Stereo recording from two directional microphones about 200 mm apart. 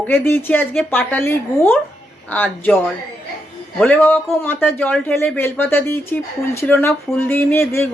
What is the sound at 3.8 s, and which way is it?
Speech, 10° left (ahead or behind).